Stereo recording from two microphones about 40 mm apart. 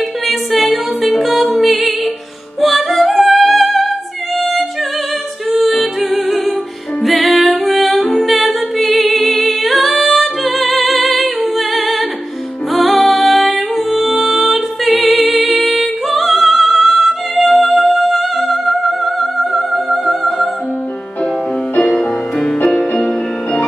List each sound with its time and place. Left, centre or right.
0.3 s music: centre
5.6 s music: centre
21.7 s music: left